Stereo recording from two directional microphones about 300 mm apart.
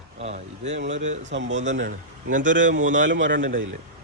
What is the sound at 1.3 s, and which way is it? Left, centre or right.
Speech, right.